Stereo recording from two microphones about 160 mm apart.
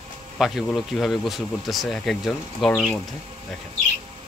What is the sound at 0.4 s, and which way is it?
Speech, centre (ahead or behind).